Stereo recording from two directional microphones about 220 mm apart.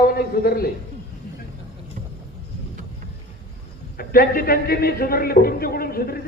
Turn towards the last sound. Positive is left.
turn(degrees=45)  # may be behind; listen again after turning